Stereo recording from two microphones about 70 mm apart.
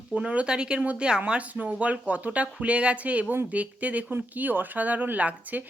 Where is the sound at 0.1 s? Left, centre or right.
Centre.